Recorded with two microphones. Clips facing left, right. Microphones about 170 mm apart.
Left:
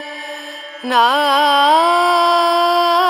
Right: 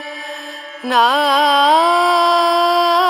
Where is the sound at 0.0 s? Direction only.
Centre (ahead or behind).